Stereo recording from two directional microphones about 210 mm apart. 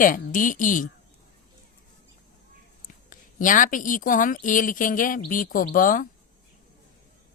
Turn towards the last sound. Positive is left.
turn(degrees=40)  # may be behind; listen again after turning